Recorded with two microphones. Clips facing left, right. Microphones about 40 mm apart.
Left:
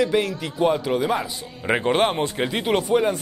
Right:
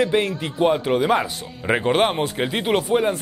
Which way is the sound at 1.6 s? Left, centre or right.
Centre.